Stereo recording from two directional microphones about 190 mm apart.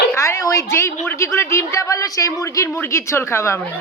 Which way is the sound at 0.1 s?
15° left (ahead or behind).